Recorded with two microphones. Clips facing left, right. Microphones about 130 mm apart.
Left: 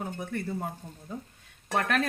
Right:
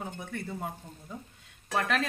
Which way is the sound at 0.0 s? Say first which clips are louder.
Left 4 dB; 5° left (ahead or behind).